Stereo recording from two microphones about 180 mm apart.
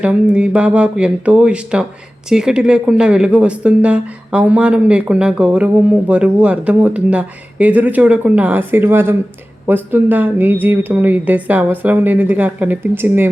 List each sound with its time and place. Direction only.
0.0 s speech: 5° right (ahead or behind)